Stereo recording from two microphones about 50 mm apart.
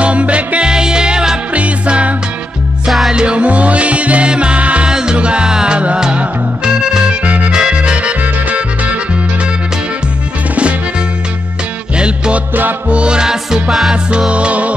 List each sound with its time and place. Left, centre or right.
0.0 s music: right
4.8 s music: centre
7.2 s music: right
10.5 s music: right
12.8 s music: right; by 13.9 s centre
14.3 s music: right